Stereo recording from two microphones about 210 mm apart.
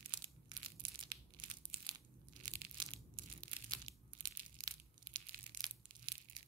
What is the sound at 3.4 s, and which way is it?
Crushing, 20° right (ahead or behind).